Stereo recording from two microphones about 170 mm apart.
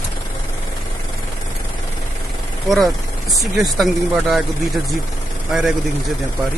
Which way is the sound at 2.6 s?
Centre (ahead or behind).